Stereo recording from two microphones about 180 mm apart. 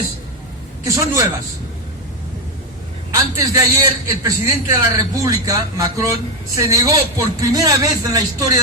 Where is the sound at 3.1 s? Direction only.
20° right (ahead or behind).